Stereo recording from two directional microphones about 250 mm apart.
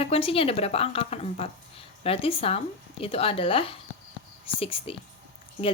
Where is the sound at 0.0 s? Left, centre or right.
Left.